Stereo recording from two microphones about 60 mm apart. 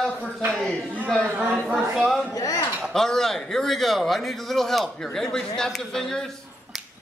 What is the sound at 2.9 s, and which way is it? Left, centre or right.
A man's voice, centre.